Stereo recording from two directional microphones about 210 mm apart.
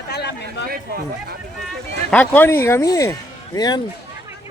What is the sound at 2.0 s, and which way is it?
Speech, 10° left (ahead or behind).